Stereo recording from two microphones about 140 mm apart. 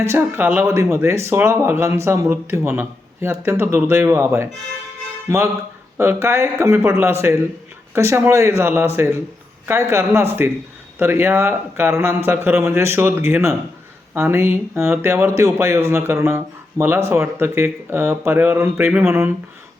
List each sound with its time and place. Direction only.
0.0 s speech: 20° right (ahead or behind)
6.0 s speech: 15° right (ahead or behind)